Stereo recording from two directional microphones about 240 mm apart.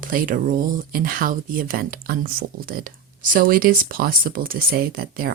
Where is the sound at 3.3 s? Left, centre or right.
Right.